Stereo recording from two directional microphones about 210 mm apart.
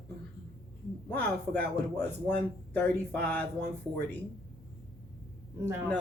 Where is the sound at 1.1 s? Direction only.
10° left (ahead or behind).